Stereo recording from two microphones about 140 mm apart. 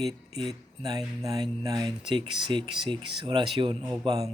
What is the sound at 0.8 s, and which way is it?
Speech, 30° right (ahead or behind).